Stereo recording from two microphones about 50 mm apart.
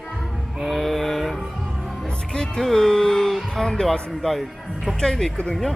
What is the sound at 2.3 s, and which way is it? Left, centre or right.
Speech, centre.